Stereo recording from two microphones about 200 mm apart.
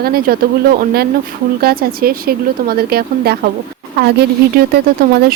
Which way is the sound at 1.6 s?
50° right (ahead or behind).